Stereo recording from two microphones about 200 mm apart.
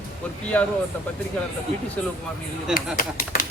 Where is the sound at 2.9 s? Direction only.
45° left (ahead or behind).